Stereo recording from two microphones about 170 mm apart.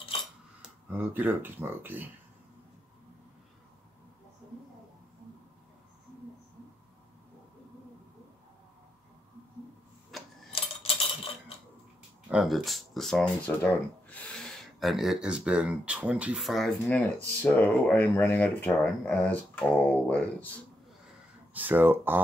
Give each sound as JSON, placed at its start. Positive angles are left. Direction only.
{"t": 0.1, "sound": "dishes", "side_deg": 35}
{"t": 0.6, "sound": "speech", "side_deg": -10}
{"t": 10.1, "sound": "a sound", "side_deg": 0}
{"t": 10.5, "sound": "coin", "side_deg": 35}
{"t": 12.3, "sound": "speech", "side_deg": 0}
{"t": 16.8, "sound": "speech", "side_deg": 10}
{"t": 21.5, "sound": "speech", "side_deg": -10}